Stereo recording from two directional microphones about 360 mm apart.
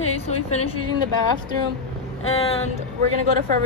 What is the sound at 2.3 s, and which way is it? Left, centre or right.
Speech, centre.